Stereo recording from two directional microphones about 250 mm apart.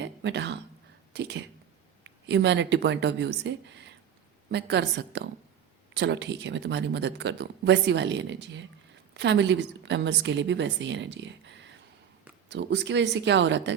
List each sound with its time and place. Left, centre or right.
0.0 s speech: right